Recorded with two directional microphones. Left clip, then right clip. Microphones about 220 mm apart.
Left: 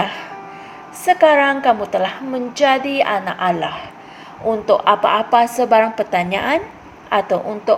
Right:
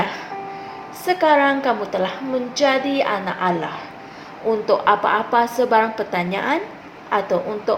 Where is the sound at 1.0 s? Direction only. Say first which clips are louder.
Left 4 dB; 35° left (ahead or behind).